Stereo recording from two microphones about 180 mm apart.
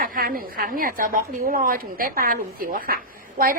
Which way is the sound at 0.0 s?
55° right (ahead or behind).